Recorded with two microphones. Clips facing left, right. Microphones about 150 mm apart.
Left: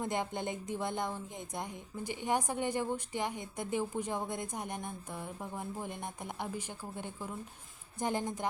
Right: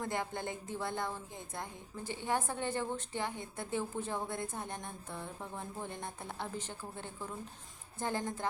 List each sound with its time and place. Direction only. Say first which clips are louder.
0.0 s a woman's voice: left 2 dB; 20° left (ahead or behind)